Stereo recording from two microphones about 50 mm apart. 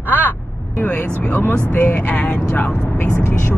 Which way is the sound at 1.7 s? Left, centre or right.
Left.